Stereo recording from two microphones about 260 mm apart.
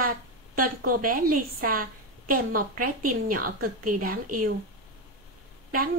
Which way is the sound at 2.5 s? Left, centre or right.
Right.